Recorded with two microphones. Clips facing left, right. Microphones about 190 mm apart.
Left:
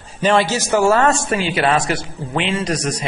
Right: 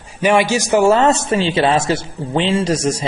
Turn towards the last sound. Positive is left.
turn(degrees=-25)  # may be behind; listen again after turning